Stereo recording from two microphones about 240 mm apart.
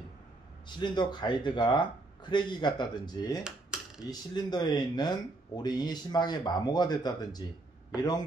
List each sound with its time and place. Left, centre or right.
0.7 s a man's voice: centre